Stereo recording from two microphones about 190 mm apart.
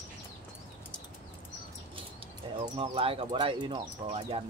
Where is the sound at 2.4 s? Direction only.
25° right (ahead or behind).